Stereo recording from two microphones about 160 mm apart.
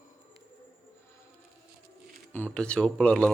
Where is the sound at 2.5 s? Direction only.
5° left (ahead or behind).